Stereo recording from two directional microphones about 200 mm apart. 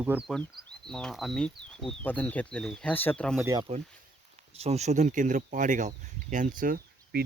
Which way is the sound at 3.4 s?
20° right (ahead or behind).